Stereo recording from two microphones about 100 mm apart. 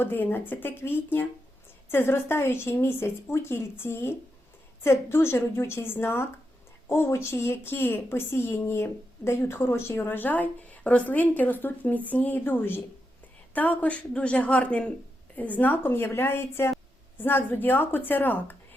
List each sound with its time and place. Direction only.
0.0 s a woman's voice: 20° left (ahead or behind)